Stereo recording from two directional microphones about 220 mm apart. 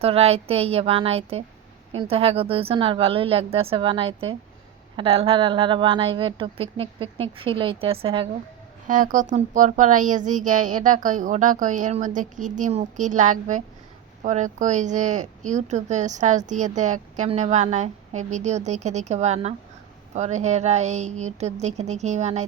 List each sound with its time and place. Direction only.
0.0 s speech: 25° right (ahead or behind)
8.9 s a woman's voice: 35° right (ahead or behind)